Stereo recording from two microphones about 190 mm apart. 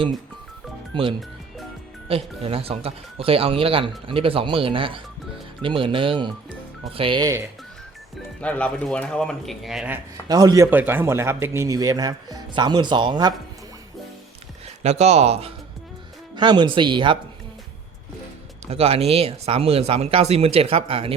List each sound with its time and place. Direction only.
0.9 s speech: 25° right (ahead or behind)
8.4 s speech: 5° left (ahead or behind)
10.2 s speech: 20° right (ahead or behind)
14.8 s speech: 35° right (ahead or behind)
18.7 s speech: 30° right (ahead or behind)